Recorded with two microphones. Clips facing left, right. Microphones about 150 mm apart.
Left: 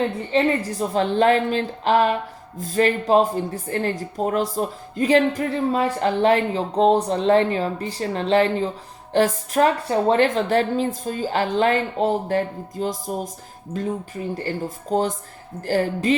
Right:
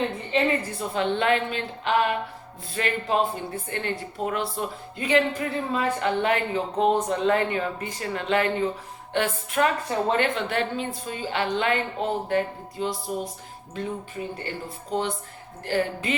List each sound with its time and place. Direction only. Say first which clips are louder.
0.3 s a woman's voice: left 3 dB; 35° left (ahead or behind)